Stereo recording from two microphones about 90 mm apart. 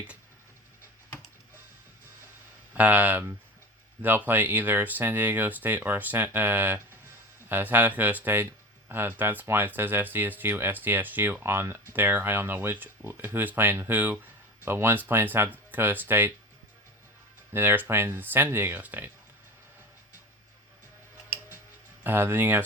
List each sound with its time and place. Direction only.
2.7 s speech: 15° right (ahead or behind)
17.5 s speech: 25° right (ahead or behind)
22.0 s speech: 25° right (ahead or behind)